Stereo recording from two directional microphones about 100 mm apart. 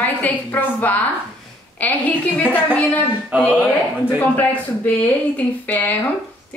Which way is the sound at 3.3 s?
15° right (ahead or behind).